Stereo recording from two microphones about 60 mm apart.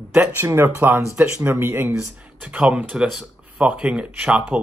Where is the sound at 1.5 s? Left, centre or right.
Right.